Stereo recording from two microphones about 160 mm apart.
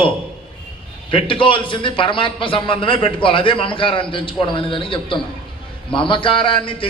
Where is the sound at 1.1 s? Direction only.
30° left (ahead or behind).